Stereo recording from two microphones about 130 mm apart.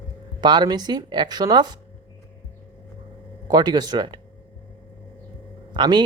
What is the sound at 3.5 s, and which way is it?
Speech, 30° right (ahead or behind).